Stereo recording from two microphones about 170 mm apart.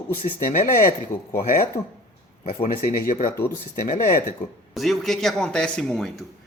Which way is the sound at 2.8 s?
50° left (ahead or behind).